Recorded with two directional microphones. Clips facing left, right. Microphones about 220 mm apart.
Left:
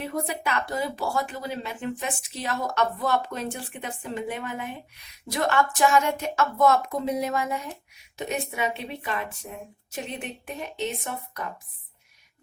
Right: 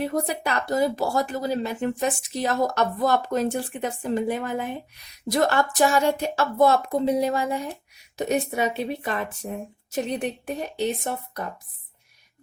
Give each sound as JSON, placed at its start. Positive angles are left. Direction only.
{"t": 0.0, "sound": "speech", "side_deg": -40}